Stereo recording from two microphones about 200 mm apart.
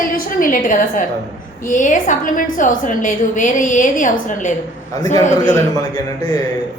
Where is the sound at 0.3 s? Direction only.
40° left (ahead or behind).